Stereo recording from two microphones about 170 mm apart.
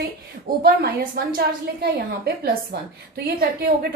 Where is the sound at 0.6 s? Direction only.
65° right (ahead or behind).